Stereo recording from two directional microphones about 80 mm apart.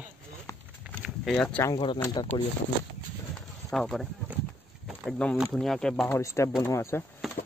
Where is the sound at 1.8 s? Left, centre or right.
Left.